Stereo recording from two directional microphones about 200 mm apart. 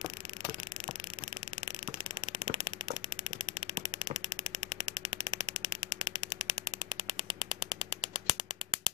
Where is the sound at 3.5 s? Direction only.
25° right (ahead or behind).